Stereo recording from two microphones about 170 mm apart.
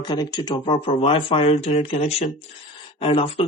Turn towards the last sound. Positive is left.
turn(degrees=35)  # may be behind; listen again after turning